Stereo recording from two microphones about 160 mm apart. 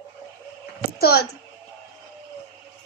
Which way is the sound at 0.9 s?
75° left (ahead or behind).